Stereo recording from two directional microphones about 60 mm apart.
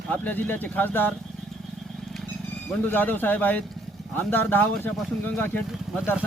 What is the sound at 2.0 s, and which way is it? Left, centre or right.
Horse, centre.